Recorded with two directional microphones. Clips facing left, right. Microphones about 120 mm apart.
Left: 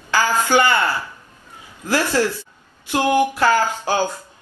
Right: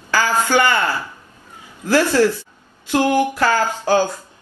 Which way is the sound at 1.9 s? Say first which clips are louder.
Right 4 dB; 15° left (ahead or behind).